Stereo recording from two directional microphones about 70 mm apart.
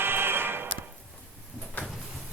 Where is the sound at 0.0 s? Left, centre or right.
Right.